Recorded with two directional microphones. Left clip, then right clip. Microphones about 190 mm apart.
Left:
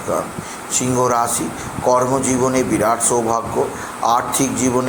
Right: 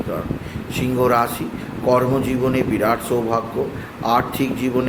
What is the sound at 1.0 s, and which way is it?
Speech, 25° right (ahead or behind).